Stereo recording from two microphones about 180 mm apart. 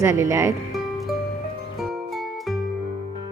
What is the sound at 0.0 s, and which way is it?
Speech, 15° right (ahead or behind).